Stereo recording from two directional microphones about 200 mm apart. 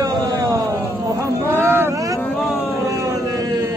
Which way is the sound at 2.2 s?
5° left (ahead or behind).